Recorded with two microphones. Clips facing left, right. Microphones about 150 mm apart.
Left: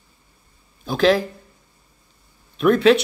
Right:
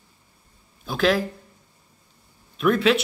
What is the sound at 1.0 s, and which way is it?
Speech, 30° left (ahead or behind).